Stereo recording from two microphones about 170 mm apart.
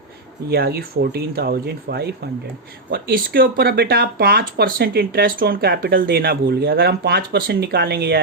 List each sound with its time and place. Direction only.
0.5 s speech: 65° right (ahead or behind)
2.9 s speech: 60° right (ahead or behind)